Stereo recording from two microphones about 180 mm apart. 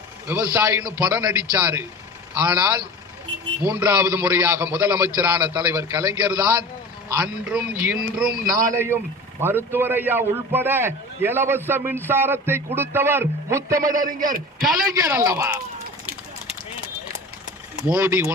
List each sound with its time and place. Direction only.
0.3 s a man's voice: 10° right (ahead or behind)
7.5 s speech: 5° right (ahead or behind)
8.3 s a man's voice: 50° right (ahead or behind)
8.7 s a man's voice: 10° right (ahead or behind)
13.8 s a man's voice: 50° right (ahead or behind)
15.0 s a man's voice: 15° right (ahead or behind)
17.8 s a man's voice: 10° right (ahead or behind)